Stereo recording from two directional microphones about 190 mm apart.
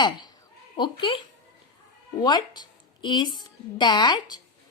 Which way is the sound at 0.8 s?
25° left (ahead or behind).